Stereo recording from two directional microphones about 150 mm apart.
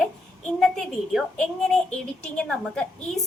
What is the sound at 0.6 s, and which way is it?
A woman's voice, centre (ahead or behind).